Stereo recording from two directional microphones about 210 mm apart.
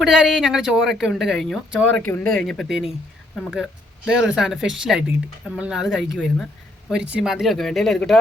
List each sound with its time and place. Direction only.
0.0 s speech: 5° right (ahead or behind)